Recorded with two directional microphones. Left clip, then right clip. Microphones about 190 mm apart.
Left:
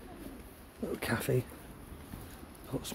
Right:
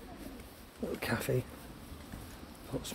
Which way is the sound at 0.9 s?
20° left (ahead or behind).